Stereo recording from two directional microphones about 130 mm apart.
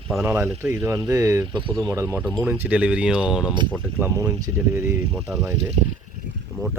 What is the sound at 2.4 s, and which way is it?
Speech, 15° right (ahead or behind).